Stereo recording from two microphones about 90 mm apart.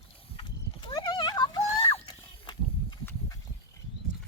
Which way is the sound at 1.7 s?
90° left.